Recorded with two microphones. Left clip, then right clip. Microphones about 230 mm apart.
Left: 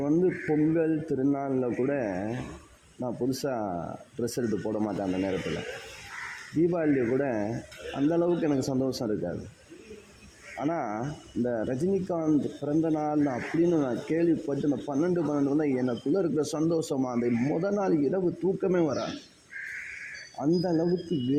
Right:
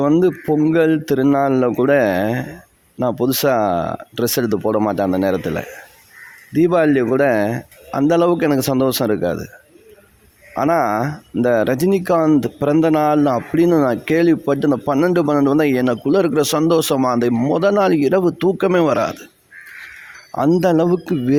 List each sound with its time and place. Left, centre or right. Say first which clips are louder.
0.0 s a man's voice: right 11 dB; right
6.6 s a man's voice: right 12 dB; right
10.6 s speech: right 15 dB; right
20.6 s speech: right 12 dB; right